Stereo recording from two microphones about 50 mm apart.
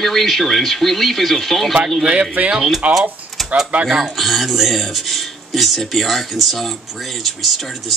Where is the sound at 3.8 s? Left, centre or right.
Centre.